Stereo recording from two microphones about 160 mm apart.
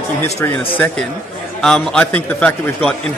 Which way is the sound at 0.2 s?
15° left (ahead or behind).